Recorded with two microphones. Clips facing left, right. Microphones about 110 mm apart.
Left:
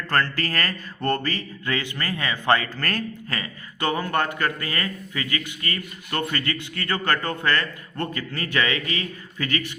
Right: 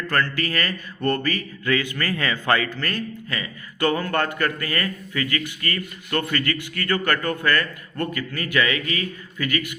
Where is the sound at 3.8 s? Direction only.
20° left (ahead or behind).